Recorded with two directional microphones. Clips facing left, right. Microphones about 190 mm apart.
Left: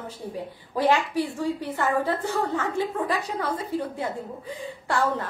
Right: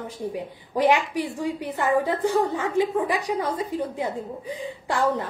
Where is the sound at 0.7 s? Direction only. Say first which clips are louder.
Right 1 dB; 15° right (ahead or behind).